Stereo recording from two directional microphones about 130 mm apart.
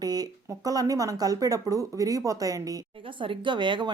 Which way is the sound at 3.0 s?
40° right (ahead or behind).